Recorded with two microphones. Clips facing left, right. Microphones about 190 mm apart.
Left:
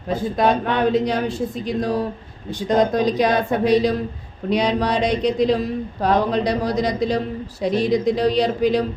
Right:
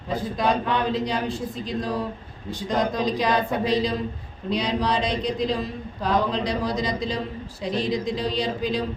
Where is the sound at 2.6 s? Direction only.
70° left (ahead or behind).